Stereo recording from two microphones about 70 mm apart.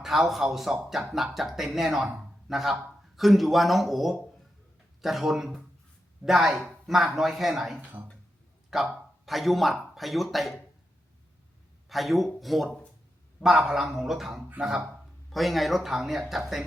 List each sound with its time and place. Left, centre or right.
0.0 s speech: centre
11.9 s speech: centre